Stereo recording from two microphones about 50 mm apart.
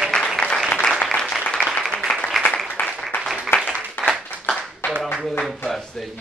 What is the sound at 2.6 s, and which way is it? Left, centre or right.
Applause, left.